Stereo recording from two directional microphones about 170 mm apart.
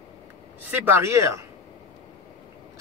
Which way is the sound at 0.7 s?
10° right (ahead or behind).